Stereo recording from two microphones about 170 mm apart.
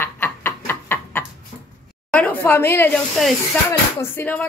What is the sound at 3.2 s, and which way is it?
A woman's voice, centre (ahead or behind).